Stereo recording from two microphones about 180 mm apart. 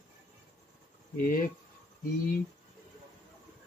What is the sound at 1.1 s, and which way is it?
Speech, 50° left (ahead or behind).